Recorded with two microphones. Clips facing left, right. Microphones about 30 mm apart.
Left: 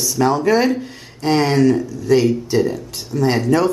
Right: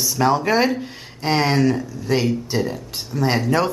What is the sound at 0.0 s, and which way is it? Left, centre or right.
Speech, centre.